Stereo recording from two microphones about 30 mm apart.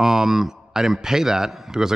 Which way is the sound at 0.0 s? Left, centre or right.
Centre.